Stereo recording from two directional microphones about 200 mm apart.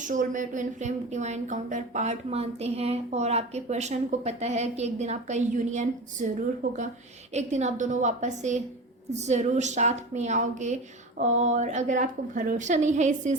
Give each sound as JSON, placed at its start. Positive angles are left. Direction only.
{"t": 0.0, "sound": "a woman's voice", "side_deg": -40}